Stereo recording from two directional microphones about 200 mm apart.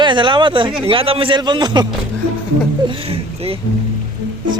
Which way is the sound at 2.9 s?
30° right (ahead or behind).